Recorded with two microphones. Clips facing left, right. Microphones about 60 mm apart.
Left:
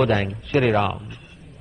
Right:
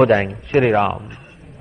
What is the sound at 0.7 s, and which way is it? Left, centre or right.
Speech, centre.